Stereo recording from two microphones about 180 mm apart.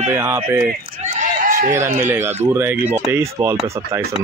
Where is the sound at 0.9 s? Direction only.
40° right (ahead or behind).